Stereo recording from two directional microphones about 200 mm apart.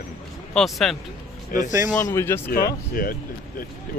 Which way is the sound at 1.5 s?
45° left (ahead or behind).